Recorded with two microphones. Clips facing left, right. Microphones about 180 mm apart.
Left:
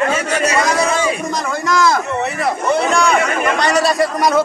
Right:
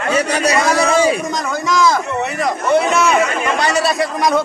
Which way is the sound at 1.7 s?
Centre (ahead or behind).